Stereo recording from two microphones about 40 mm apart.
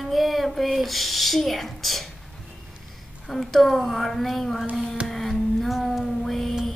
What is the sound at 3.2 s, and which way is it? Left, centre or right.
Child singing, centre.